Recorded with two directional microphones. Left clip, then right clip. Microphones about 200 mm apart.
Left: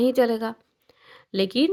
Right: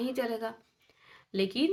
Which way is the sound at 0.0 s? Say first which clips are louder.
Left 12 dB; 40° left (ahead or behind).